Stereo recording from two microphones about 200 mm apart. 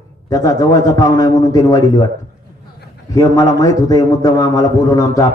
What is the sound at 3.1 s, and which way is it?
Speech, 20° left (ahead or behind).